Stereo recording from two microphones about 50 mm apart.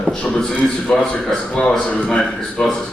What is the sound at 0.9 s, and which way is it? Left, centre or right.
Speech, centre.